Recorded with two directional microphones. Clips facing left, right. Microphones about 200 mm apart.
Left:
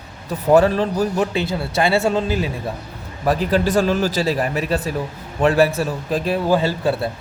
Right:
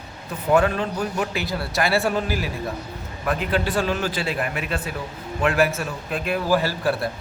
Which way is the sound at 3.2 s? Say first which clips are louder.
Left 6 dB; 35° left (ahead or behind).